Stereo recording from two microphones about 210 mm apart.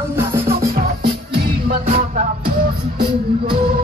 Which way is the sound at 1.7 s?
30° right (ahead or behind).